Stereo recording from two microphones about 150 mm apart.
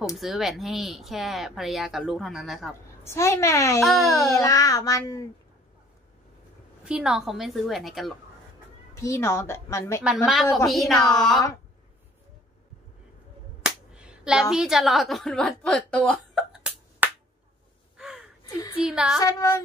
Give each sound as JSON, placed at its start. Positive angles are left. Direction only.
{"t": 0.2, "sound": "speech", "side_deg": 0}
{"t": 3.0, "sound": "a woman's voice", "side_deg": 15}
{"t": 3.8, "sound": "speech", "side_deg": 0}
{"t": 4.3, "sound": "a woman's voice", "side_deg": 20}
{"t": 6.8, "sound": "speech", "side_deg": -5}
{"t": 8.9, "sound": "a woman's voice", "side_deg": 20}
{"t": 10.0, "sound": "speech", "side_deg": 0}
{"t": 13.6, "sound": "a sound", "side_deg": -5}
{"t": 14.5, "sound": "speech", "side_deg": -5}
{"t": 17.0, "sound": "finger snapping", "side_deg": -10}
{"t": 17.9, "sound": "gasp", "side_deg": -5}
{"t": 18.9, "sound": "speech", "side_deg": -5}
{"t": 19.2, "sound": "a woman's voice", "side_deg": 25}